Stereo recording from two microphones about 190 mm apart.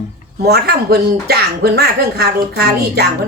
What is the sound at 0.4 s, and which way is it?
Speech, 55° right (ahead or behind).